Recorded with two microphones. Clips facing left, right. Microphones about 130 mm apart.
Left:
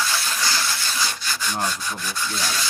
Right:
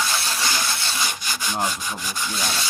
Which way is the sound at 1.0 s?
15° right (ahead or behind).